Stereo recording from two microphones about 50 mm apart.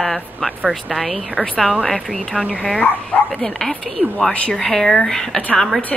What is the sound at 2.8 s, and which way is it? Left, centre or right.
Speech, left.